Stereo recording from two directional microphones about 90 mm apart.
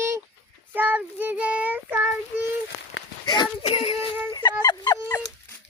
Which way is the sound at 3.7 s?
90° left.